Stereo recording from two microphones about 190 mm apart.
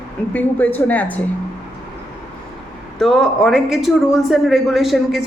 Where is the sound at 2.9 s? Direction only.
Centre (ahead or behind).